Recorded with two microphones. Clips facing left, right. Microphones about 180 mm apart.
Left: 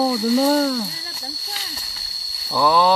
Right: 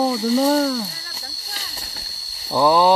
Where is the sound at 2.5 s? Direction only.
20° right (ahead or behind).